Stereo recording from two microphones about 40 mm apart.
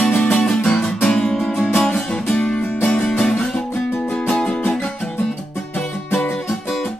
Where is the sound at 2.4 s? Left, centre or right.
Left.